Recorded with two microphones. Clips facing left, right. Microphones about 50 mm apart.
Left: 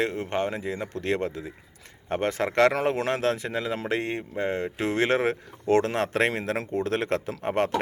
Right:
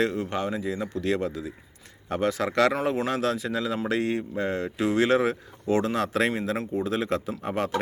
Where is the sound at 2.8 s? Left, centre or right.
Left.